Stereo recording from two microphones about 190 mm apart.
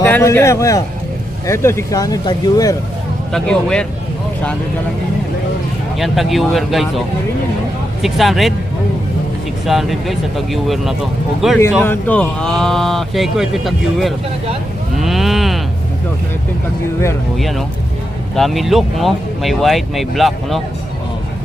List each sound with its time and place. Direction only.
0.0 s a man's voice: 15° left (ahead or behind)
3.3 s speech: 5° left (ahead or behind)
6.0 s speech: centre (ahead or behind)
8.0 s speech: centre (ahead or behind)
9.6 s speech: centre (ahead or behind)
14.9 s moo: centre (ahead or behind)
17.3 s speech: centre (ahead or behind)